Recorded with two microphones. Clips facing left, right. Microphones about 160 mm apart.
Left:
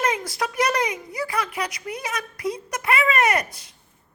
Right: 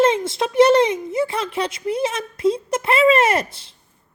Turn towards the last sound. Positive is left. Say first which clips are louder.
# right 3 dB
turn(degrees=-25)  # may be behind; listen again after turning